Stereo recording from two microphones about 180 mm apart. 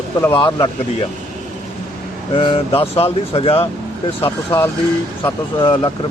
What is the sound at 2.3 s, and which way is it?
Speech, 30° left (ahead or behind).